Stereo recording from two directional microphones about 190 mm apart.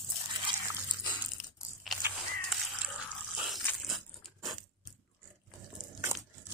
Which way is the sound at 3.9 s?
Centre (ahead or behind).